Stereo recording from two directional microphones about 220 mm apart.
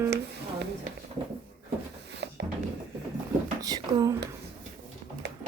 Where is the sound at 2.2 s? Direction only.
50° right (ahead or behind).